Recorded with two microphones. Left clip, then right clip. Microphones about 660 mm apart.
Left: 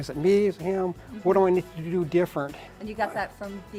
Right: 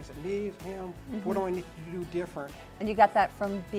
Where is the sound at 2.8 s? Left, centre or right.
Right.